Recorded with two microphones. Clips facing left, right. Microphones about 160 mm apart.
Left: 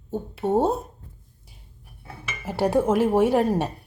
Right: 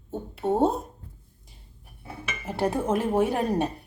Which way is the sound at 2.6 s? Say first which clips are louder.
Left 5 dB; 80° left.